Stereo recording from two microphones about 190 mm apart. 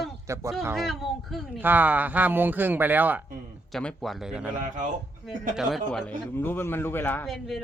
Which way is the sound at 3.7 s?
Centre (ahead or behind).